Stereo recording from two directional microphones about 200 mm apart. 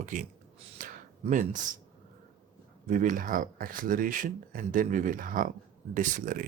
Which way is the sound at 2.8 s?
40° right (ahead or behind).